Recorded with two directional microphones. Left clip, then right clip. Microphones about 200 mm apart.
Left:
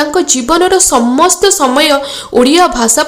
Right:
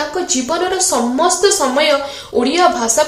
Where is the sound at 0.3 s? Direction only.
40° left (ahead or behind).